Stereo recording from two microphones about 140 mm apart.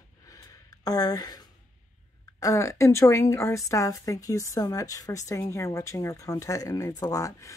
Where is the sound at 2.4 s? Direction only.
25° left (ahead or behind).